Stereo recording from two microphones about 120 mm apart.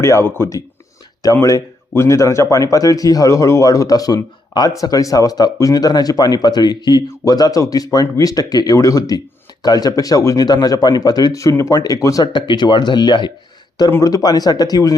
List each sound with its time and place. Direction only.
0.0 s speech: 20° left (ahead or behind)